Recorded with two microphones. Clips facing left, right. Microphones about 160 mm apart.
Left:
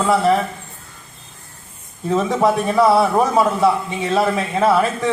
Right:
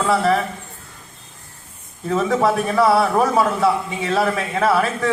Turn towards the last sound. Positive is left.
turn(degrees=20)  # may be behind; listen again after turning